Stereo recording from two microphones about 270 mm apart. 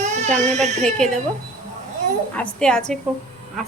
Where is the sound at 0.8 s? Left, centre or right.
Centre.